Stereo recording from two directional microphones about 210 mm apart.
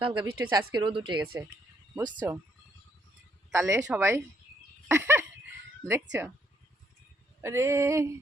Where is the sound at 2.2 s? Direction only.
10° right (ahead or behind).